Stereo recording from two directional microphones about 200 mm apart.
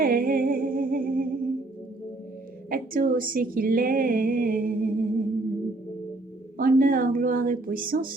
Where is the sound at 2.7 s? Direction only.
45° right (ahead or behind).